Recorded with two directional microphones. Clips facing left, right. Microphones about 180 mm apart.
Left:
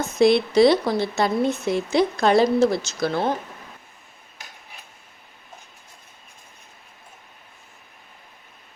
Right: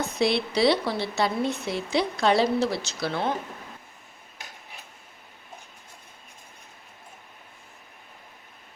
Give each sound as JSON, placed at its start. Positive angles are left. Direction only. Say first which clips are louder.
{"t": 0.0, "sound": "a woman's voice", "louder": "left 7 dB", "side_deg": 45}